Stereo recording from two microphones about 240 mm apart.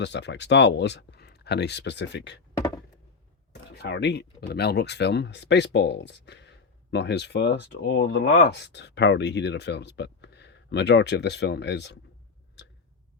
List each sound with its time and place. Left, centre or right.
0.0 s speech: left
3.5 s speech: left